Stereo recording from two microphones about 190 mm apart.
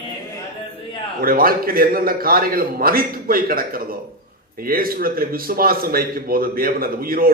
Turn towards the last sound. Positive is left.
turn(degrees=-50)  # may be behind; listen again after turning